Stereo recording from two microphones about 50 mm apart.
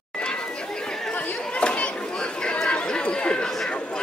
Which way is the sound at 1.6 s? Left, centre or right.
Left.